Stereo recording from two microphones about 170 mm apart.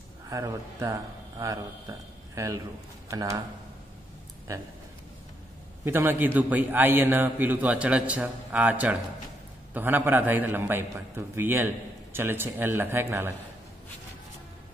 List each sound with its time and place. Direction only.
0.3 s speech: 20° right (ahead or behind)
5.9 s a man's voice: 10° right (ahead or behind)